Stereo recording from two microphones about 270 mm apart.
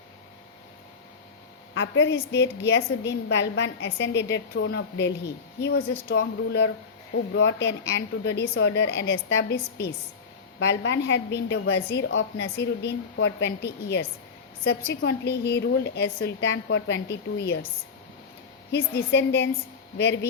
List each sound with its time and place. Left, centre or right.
1.7 s a woman's voice: left
15.0 s a woman's voice: left
18.7 s a woman's voice: left